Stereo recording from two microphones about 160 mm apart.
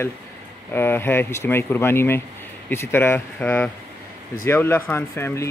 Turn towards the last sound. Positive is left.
turn(degrees=15)  # may be behind; listen again after turning